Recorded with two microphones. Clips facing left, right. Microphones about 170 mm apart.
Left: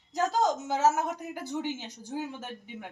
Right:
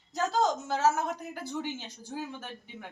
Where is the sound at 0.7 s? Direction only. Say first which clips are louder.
Left 1 dB; 15° left (ahead or behind).